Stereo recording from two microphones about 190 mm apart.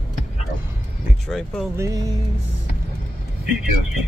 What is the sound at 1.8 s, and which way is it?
Music, 20° right (ahead or behind).